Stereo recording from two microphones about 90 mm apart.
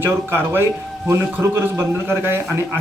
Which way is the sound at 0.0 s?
25° right (ahead or behind).